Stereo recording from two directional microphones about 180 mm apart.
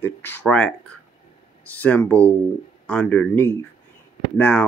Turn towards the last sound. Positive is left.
turn(degrees=10)  # may be behind; listen again after turning